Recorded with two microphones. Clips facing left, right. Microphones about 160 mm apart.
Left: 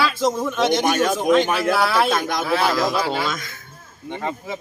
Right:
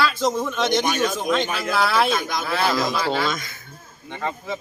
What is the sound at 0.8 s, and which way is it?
Speech, 55° left (ahead or behind).